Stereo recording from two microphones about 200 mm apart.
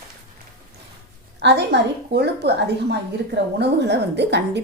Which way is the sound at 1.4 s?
60° right (ahead or behind).